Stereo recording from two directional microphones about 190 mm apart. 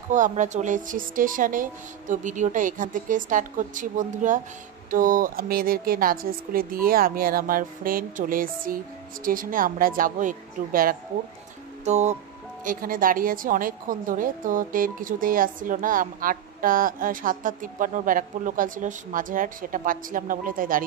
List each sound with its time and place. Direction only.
0.1 s a woman's voice: 40° right (ahead or behind)
11.8 s speech: 35° right (ahead or behind)
12.6 s a woman's voice: 50° right (ahead or behind)